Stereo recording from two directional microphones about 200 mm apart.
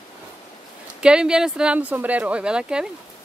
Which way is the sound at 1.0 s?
5° right (ahead or behind).